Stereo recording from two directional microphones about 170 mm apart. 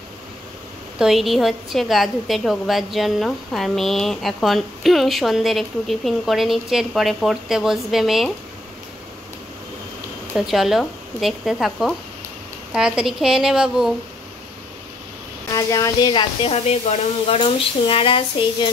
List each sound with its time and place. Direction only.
0.9 s a woman's voice: centre (ahead or behind)
10.3 s a woman's voice: centre (ahead or behind)
15.5 s speech: 20° left (ahead or behind)